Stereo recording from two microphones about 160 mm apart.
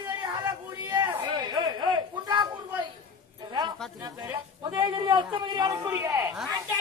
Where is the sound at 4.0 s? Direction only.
25° right (ahead or behind).